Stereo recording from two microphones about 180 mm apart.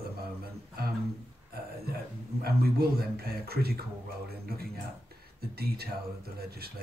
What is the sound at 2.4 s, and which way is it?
Speech, 60° right (ahead or behind).